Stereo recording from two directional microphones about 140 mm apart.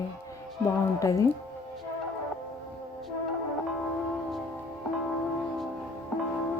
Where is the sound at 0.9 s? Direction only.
20° left (ahead or behind).